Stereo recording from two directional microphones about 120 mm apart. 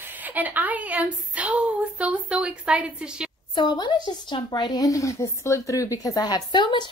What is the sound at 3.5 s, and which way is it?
Speech, 40° left (ahead or behind).